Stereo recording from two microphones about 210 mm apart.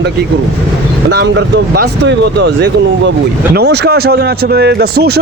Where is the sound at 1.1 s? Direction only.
55° right (ahead or behind).